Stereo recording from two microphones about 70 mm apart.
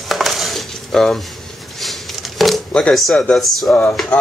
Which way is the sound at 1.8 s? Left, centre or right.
Centre.